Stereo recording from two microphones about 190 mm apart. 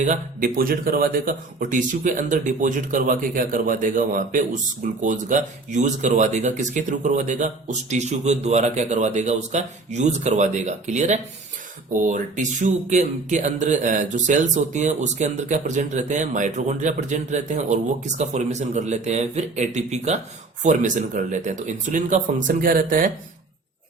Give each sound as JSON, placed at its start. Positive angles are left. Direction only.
{"t": 0.0, "sound": "speech", "side_deg": -40}